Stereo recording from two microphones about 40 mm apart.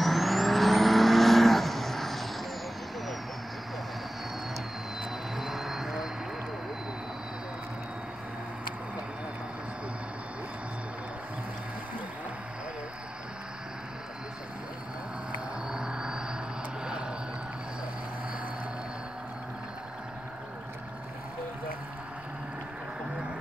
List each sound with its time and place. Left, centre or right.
0.0 s vehicle: centre
5.3 s vehicle: centre
15.7 s vehicle: centre